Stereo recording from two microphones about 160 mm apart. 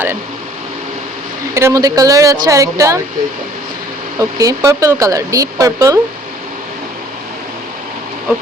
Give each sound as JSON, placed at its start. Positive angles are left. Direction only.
{"t": 1.5, "sound": "speech", "side_deg": -20}
{"t": 4.2, "sound": "speech", "side_deg": -20}